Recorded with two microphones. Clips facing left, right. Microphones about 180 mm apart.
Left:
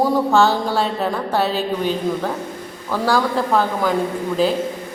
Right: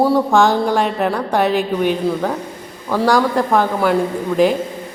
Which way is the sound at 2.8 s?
15° right (ahead or behind).